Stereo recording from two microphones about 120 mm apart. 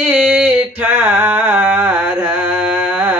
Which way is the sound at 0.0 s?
10° right (ahead or behind).